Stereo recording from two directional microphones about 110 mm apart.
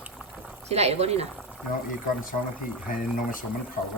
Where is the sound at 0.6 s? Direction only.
75° right (ahead or behind).